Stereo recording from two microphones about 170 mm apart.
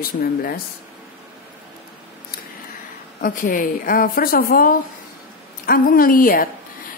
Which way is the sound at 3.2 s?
55° left (ahead or behind).